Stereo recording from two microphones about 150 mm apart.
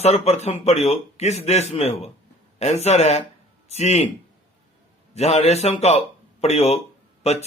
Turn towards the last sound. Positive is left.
turn(degrees=45)  # may be behind; listen again after turning